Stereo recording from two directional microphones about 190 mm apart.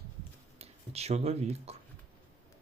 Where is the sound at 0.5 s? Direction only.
35° right (ahead or behind).